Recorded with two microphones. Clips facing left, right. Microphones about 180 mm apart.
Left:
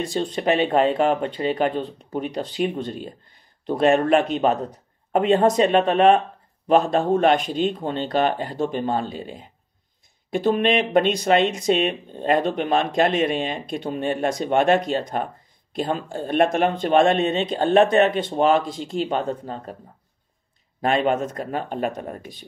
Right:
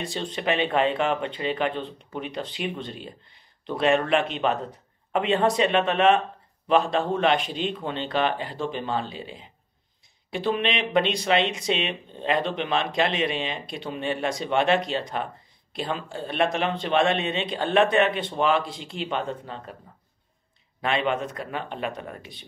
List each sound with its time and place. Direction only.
0.0 s speech: 40° left (ahead or behind)
20.8 s speech: 45° left (ahead or behind)